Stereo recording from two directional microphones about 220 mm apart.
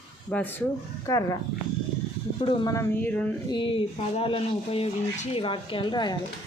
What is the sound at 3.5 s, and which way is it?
Speech, 25° left (ahead or behind).